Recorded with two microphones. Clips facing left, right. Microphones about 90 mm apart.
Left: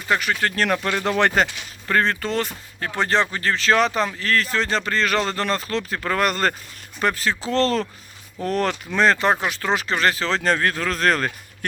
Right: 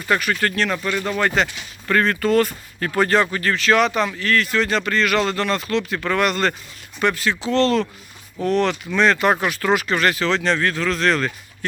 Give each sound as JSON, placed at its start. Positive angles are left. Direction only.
{"t": 0.1, "sound": "speech", "side_deg": 20}
{"t": 0.5, "sound": "speech", "side_deg": 45}
{"t": 1.9, "sound": "speech", "side_deg": 30}
{"t": 9.3, "sound": "speech", "side_deg": 20}